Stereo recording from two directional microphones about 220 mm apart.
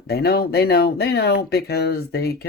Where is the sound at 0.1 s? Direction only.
45° left (ahead or behind).